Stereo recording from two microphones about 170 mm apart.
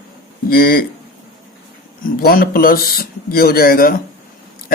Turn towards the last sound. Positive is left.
turn(degrees=60)  # may be behind; listen again after turning